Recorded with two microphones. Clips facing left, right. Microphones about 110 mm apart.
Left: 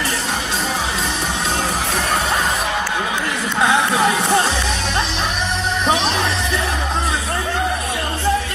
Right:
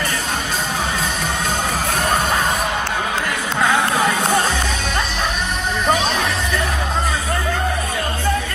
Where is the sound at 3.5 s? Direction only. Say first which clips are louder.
Left 1 dB; 5° left (ahead or behind).